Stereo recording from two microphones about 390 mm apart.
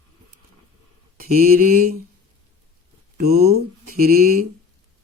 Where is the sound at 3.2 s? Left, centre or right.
Right.